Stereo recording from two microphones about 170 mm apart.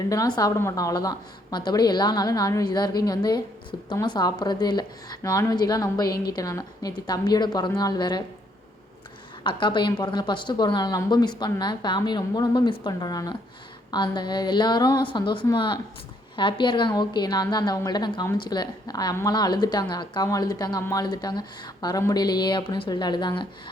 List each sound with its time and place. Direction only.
0.1 s a woman's voice: 20° left (ahead or behind)
9.4 s a woman's voice: 30° left (ahead or behind)